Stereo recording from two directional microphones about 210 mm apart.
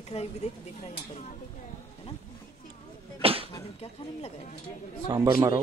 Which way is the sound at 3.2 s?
25° right (ahead or behind).